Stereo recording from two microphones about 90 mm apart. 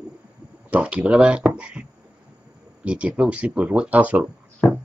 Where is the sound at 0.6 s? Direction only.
15° right (ahead or behind).